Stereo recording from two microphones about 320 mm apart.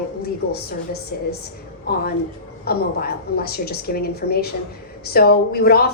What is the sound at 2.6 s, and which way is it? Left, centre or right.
A woman's voice, left.